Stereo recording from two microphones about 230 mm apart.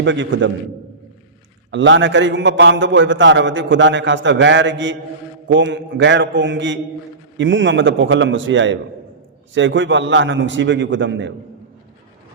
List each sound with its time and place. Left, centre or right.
0.0 s a man's voice: right
1.7 s a man's voice: right